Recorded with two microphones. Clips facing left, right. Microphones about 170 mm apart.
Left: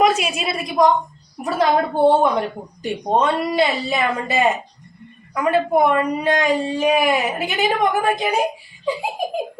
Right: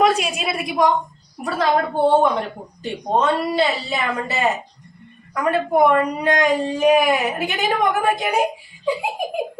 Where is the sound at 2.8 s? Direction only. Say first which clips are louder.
Left 1 dB; 15° left (ahead or behind).